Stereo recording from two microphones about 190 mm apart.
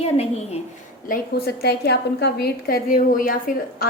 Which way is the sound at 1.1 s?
55° left (ahead or behind).